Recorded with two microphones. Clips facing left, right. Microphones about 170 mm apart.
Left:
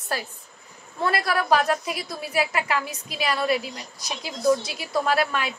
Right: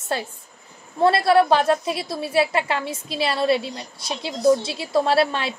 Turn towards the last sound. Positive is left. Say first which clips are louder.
# right 4 dB
turn(degrees=-30)  # may be behind; listen again after turning